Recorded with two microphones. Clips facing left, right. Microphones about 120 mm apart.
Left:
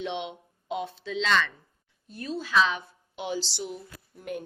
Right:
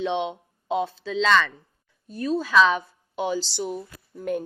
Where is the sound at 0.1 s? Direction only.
30° right (ahead or behind).